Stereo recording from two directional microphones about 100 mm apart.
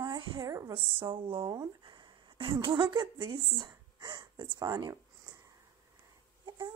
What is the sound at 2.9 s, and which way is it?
Speech, 55° right (ahead or behind).